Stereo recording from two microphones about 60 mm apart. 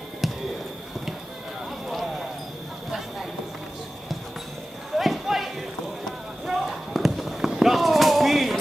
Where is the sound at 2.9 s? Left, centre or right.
Centre.